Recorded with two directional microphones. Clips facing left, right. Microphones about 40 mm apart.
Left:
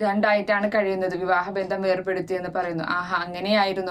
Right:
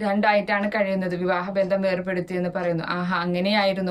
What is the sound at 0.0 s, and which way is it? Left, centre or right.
Speech, right.